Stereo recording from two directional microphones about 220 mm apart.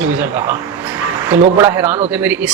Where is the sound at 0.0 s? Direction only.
10° right (ahead or behind).